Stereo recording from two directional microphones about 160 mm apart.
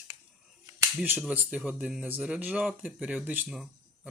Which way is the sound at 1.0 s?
10° right (ahead or behind).